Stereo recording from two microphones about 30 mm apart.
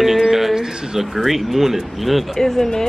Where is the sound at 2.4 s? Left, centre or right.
Centre.